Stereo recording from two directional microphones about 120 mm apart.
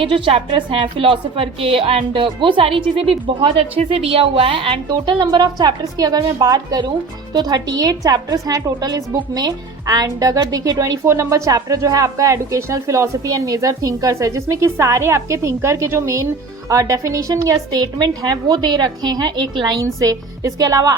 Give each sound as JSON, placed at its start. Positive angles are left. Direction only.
{"t": 0.0, "sound": "a woman's voice", "side_deg": -50}